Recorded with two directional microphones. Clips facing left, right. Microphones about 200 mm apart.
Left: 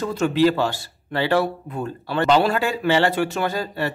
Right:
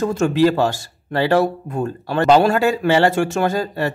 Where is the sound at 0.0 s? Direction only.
45° right (ahead or behind).